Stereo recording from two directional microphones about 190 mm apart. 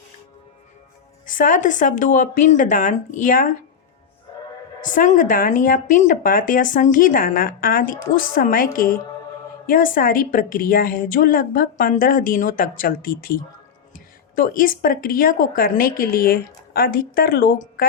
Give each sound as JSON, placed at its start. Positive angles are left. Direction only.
{"t": 1.3, "sound": "speech", "side_deg": 45}
{"t": 4.8, "sound": "speech", "side_deg": 45}